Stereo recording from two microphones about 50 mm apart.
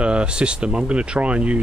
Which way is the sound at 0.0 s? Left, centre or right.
Right.